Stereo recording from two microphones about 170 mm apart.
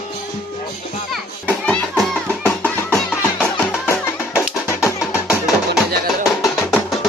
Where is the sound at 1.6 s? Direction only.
5° left (ahead or behind).